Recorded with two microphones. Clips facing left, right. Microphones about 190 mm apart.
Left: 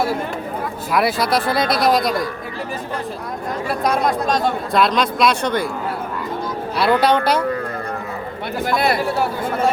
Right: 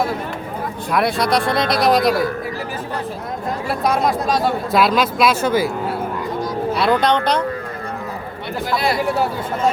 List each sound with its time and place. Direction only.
0.9 s speech: centre (ahead or behind)
3.7 s speech: centre (ahead or behind)
6.7 s speech: 5° left (ahead or behind)
8.7 s speech: 55° left (ahead or behind)